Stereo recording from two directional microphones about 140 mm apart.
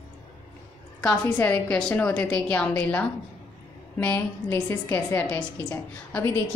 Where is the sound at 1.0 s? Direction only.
10° left (ahead or behind).